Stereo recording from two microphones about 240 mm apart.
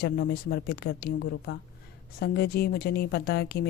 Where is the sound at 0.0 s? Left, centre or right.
Left.